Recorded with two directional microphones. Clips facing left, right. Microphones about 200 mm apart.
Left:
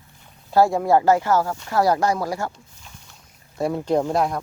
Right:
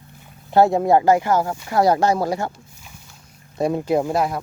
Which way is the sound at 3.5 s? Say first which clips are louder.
Right 2 dB; 15° right (ahead or behind).